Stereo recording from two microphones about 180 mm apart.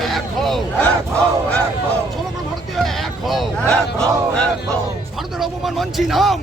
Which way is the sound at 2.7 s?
Centre (ahead or behind).